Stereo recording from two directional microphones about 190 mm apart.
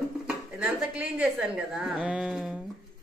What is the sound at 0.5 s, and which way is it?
A woman's voice, 5° right (ahead or behind).